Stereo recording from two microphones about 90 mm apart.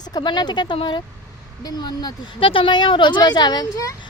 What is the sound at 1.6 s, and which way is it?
Speech, 50° left (ahead or behind).